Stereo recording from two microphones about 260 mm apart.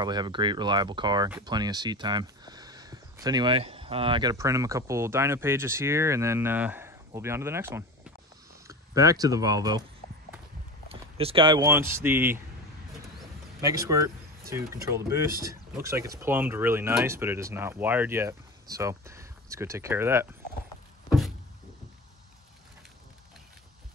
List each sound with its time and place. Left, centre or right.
0.0 s speech: centre
10.9 s speech: right
13.6 s speech: centre